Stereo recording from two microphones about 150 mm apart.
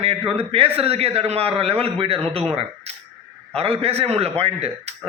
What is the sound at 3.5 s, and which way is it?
A man's voice, 40° right (ahead or behind).